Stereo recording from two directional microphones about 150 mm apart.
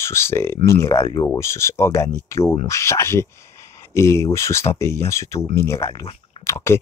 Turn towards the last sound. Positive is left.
turn(degrees=20)  # may be behind; listen again after turning